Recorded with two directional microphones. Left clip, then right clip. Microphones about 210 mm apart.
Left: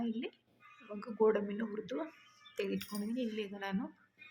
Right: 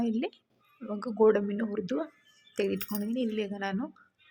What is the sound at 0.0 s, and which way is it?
A woman's voice, 30° right (ahead or behind).